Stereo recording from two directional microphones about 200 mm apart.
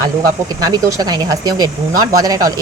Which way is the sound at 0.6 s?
15° right (ahead or behind).